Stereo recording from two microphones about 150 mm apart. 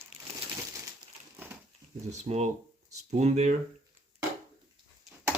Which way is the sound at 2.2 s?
45° right (ahead or behind).